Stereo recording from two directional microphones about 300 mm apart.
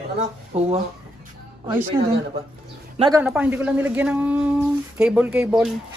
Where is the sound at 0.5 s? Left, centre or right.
Centre.